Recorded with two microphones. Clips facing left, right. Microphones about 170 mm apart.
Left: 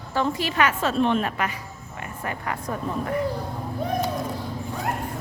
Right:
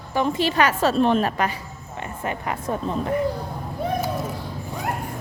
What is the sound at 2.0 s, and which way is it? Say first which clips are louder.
Speech: right 3 dB; 20° right (ahead or behind).